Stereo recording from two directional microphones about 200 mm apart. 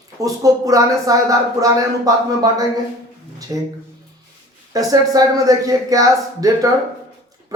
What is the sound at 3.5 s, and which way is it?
Speech, 20° right (ahead or behind).